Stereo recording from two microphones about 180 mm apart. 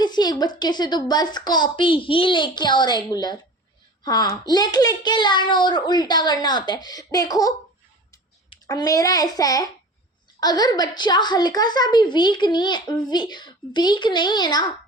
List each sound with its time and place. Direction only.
0.0 s a woman's voice: 25° left (ahead or behind)